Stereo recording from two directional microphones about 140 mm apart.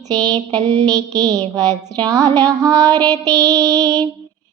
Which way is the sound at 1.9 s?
25° right (ahead or behind).